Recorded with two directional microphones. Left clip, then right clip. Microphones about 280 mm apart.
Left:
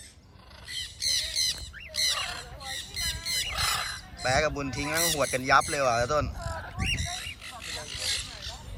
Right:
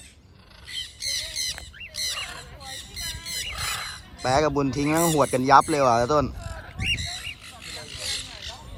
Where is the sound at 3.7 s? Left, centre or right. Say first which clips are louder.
Left 1 dB; left.